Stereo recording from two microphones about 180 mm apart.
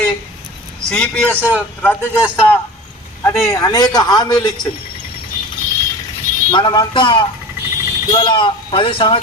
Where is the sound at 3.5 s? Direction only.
20° left (ahead or behind).